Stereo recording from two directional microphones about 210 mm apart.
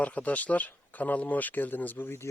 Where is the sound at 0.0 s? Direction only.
5° left (ahead or behind).